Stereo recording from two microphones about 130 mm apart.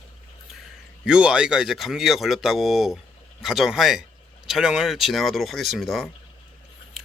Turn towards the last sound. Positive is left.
turn(degrees=0)  # may be behind; listen again after turning